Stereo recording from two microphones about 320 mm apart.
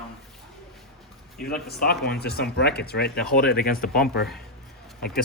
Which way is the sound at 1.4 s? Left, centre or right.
Left.